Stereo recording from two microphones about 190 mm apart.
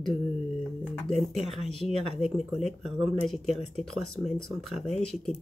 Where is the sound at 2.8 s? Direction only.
Centre (ahead or behind).